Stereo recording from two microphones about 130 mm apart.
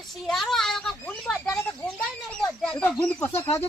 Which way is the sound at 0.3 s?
Centre (ahead or behind).